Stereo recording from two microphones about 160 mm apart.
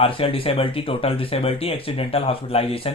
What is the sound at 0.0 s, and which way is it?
Speech, 35° left (ahead or behind).